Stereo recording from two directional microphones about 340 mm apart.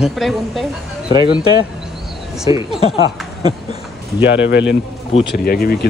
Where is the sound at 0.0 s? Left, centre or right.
Centre.